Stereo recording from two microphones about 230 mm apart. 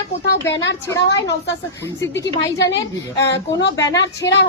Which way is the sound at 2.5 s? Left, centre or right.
Left.